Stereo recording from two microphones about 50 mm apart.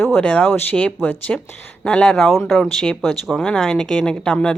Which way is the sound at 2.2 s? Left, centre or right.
Centre.